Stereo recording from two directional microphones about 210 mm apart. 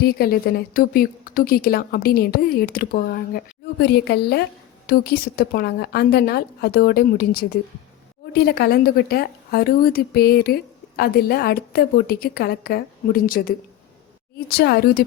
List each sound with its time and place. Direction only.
0.2 s a woman's voice: 45° left (ahead or behind)